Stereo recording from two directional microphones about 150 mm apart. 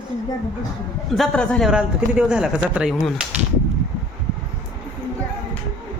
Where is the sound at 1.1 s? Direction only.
5° left (ahead or behind).